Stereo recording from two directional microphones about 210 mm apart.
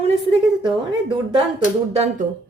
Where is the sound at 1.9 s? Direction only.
30° right (ahead or behind).